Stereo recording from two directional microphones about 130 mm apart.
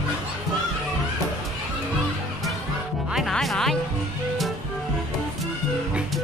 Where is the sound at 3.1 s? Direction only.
Centre (ahead or behind).